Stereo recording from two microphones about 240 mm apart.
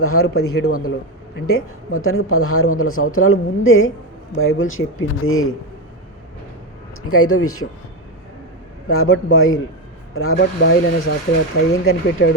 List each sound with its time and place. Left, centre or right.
0.0 s speech: left
0.3 s speech: left
1.5 s speech: left
7.1 s speech: left
8.9 s speech: left
10.3 s speech: left
11.7 s speech: left